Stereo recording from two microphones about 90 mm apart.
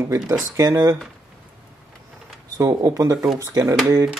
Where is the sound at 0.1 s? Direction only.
40° right (ahead or behind).